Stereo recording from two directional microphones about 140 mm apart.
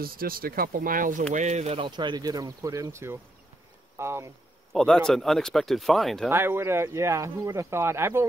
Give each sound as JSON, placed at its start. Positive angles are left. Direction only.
{"t": 0.0, "sound": "speech", "side_deg": -90}
{"t": 1.3, "sound": "speech", "side_deg": -55}
{"t": 1.8, "sound": "speech", "side_deg": -35}
{"t": 4.7, "sound": "speech", "side_deg": 5}
{"t": 6.3, "sound": "speech", "side_deg": -15}